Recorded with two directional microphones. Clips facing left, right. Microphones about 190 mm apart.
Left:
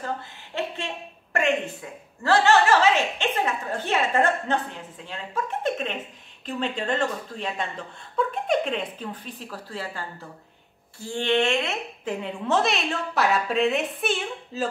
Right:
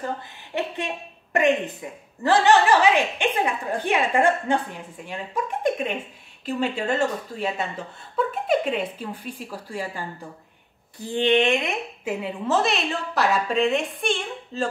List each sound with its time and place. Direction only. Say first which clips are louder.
0.0 s a woman's voice: right 1 dB; 15° right (ahead or behind); by 14.7 s 5° left (ahead or behind)